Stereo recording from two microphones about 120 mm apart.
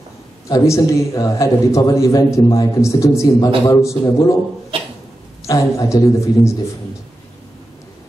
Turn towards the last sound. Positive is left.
turn(degrees=25)  # may be behind; listen again after turning